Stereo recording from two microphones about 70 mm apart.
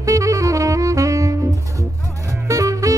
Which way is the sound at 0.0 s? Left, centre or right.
Right.